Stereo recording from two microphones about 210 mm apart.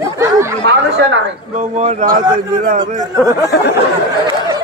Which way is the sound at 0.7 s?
55° right (ahead or behind).